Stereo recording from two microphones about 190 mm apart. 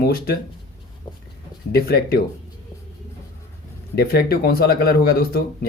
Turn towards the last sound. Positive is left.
turn(degrees=55)  # may be behind; listen again after turning